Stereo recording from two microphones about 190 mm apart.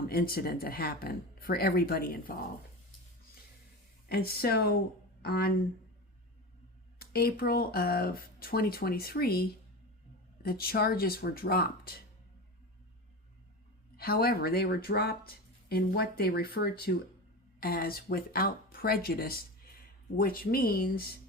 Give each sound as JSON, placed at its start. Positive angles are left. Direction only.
{"t": 0.1, "sound": "speech", "side_deg": 50}
{"t": 4.1, "sound": "speech", "side_deg": 55}
{"t": 7.0, "sound": "speech", "side_deg": 55}
{"t": 13.9, "sound": "speech", "side_deg": 55}